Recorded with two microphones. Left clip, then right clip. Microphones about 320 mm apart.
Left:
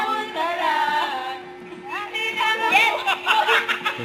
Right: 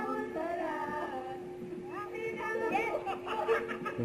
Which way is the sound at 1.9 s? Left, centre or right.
Centre.